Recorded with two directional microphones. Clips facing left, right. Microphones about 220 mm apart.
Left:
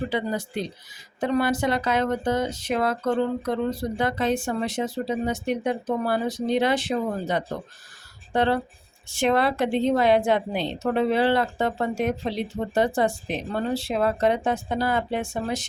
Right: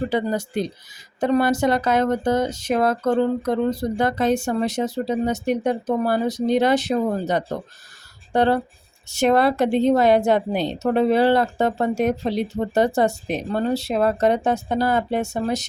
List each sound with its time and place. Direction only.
0.1 s a woman's voice: 45° right (ahead or behind)